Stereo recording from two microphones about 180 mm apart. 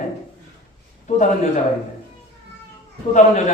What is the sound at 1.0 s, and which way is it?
Speech, 45° left (ahead or behind).